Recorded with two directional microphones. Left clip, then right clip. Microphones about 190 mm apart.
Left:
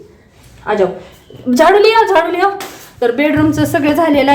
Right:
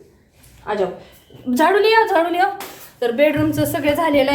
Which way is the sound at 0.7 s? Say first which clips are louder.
Left 7 dB; 25° left (ahead or behind).